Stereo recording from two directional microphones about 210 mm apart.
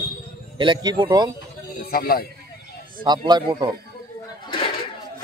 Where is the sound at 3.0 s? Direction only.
20° right (ahead or behind).